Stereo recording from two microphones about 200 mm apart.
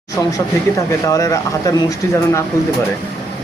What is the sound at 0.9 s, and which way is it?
Speech, 15° left (ahead or behind).